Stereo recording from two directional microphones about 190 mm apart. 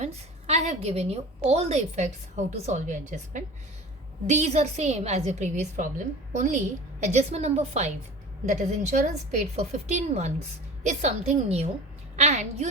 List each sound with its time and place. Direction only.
0.0 s a woman's voice: 35° right (ahead or behind)